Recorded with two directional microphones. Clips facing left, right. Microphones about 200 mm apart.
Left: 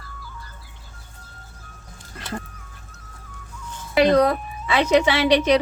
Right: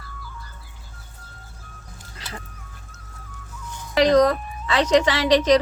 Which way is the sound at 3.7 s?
15° right (ahead or behind).